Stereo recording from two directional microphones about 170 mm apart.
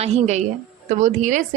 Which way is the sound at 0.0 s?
40° right (ahead or behind).